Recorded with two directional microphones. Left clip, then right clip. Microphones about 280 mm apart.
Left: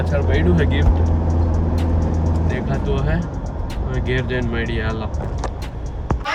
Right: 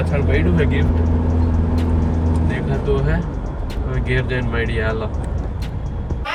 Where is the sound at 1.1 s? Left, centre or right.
Centre.